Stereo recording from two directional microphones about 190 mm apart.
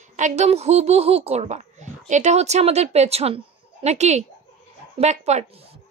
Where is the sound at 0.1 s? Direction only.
40° right (ahead or behind).